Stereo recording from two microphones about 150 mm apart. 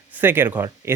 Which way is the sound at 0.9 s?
15° right (ahead or behind).